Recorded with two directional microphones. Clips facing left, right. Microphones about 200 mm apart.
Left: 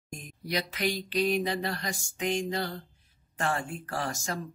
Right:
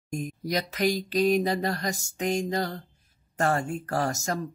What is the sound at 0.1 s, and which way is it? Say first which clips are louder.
Speech: right 5 dB; 45° right (ahead or behind).